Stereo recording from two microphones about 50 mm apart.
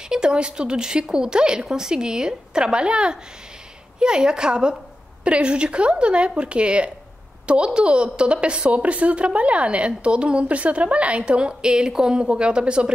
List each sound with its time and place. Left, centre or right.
0.1 s a woman's voice: centre